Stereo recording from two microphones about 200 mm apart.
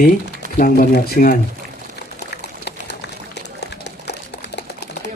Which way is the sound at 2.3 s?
55° left (ahead or behind).